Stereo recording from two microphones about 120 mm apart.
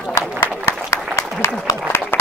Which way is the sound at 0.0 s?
10° right (ahead or behind).